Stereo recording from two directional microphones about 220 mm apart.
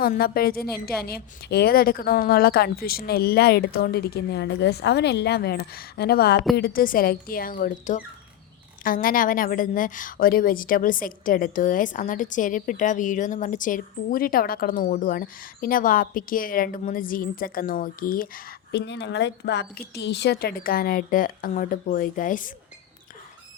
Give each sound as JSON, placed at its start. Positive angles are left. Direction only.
{"t": 0.0, "sound": "a woman's voice", "side_deg": 45}